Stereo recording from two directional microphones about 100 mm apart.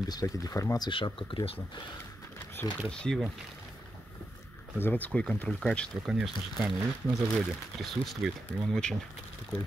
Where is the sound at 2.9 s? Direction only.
10° left (ahead or behind).